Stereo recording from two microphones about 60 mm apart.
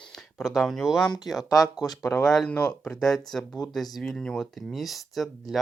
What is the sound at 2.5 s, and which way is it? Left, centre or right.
Speech, centre.